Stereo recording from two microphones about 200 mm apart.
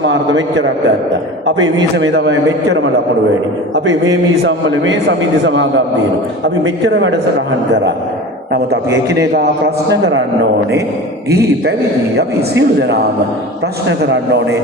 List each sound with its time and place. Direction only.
0.0 s a man's voice: 65° right (ahead or behind)
4.1 s a man's voice: 70° right (ahead or behind)
12.1 s a man's voice: 55° right (ahead or behind)